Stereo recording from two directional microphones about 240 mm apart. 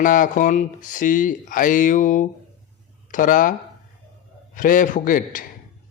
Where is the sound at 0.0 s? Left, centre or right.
Left.